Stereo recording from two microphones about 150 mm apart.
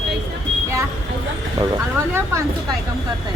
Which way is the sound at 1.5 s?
20° right (ahead or behind).